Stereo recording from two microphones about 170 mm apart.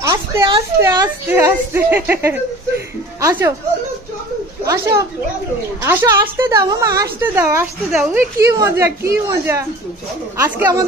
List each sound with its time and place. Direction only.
0.0 s children playing: 20° right (ahead or behind)
0.7 s a woman's voice: 20° right (ahead or behind)
4.6 s a woman's voice: 15° right (ahead or behind)